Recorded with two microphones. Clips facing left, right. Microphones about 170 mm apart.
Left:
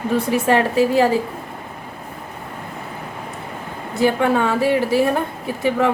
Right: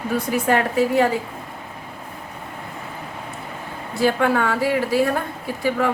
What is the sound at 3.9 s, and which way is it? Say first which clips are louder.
A woman's voice: left 2 dB; 20° left (ahead or behind).